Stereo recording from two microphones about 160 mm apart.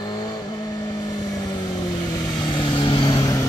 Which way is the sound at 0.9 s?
25° left (ahead or behind).